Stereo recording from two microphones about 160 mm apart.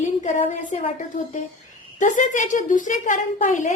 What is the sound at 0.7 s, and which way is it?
Speech, 45° left (ahead or behind).